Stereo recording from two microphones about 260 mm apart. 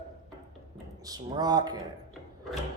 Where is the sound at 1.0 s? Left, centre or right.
Centre.